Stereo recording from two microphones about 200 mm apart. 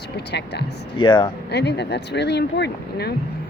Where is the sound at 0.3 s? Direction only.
55° left (ahead or behind).